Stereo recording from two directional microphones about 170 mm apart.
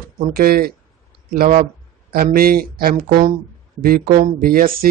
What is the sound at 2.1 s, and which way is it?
Speech, 60° right (ahead or behind).